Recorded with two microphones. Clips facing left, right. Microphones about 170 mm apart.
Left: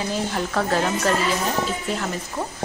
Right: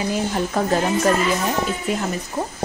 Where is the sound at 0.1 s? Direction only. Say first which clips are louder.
Right 3 dB; 15° right (ahead or behind).